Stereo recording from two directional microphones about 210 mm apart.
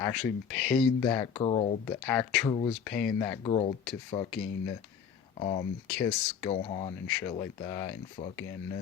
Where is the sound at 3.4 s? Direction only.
25° left (ahead or behind).